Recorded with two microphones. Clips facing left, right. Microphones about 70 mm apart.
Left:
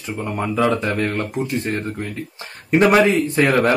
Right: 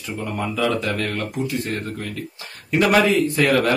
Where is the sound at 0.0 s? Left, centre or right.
Left.